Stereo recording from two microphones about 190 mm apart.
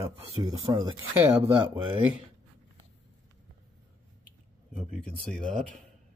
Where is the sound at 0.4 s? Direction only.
20° right (ahead or behind).